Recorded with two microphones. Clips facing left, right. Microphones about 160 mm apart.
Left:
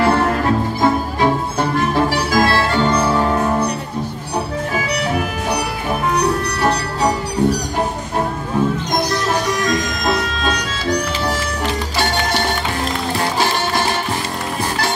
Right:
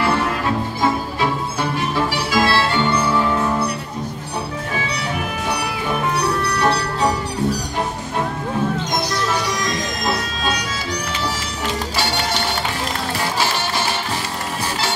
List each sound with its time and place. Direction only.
0.0 s music: 45° left (ahead or behind)
9.7 s music: 45° left (ahead or behind)
13.2 s music: 50° left (ahead or behind)